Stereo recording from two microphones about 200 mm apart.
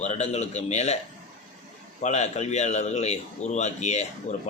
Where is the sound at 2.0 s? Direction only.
35° left (ahead or behind).